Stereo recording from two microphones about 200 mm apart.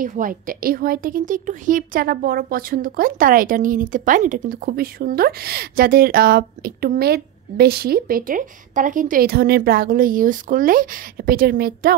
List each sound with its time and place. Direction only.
0.0 s a woman's voice: 40° right (ahead or behind)